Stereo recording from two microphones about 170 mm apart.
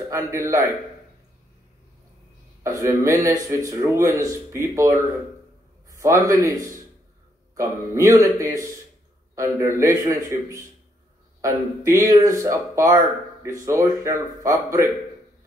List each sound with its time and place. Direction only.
0.1 s speech: 15° right (ahead or behind)
2.6 s a man's voice: 20° right (ahead or behind)
7.5 s a man's voice: 15° right (ahead or behind)